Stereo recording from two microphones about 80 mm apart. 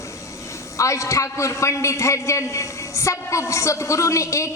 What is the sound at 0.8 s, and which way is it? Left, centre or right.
A woman's voice, left.